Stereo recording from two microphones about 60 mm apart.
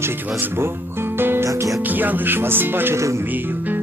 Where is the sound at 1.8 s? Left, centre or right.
Right.